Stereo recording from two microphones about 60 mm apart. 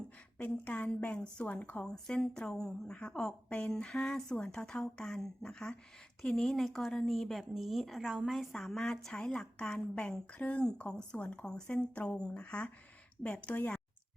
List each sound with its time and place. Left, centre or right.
0.4 s speech: left
1.0 s a woman's voice: centre
1.8 s a woman's voice: centre
8.3 s a woman's voice: centre; by 13.8 s left